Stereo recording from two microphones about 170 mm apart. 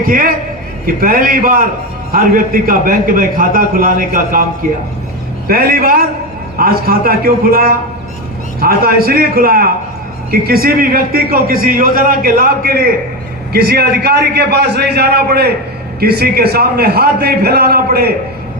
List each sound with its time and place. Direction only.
0.0 s a man's voice: 55° right (ahead or behind)
5.5 s a man's voice: 60° right (ahead or behind)